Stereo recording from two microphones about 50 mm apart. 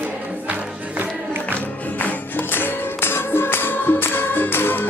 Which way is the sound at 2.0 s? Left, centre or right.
Left.